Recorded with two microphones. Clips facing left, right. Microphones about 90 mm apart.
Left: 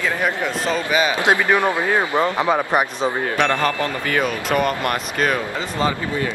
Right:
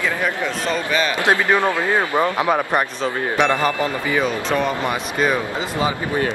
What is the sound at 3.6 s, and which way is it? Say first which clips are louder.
Speech: right 1 dB; 15° right (ahead or behind).